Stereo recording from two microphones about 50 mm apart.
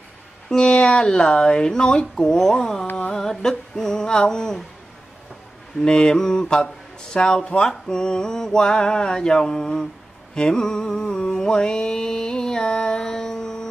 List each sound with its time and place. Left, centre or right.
0.6 s speech: centre
5.8 s speech: centre
10.3 s carnatic music: centre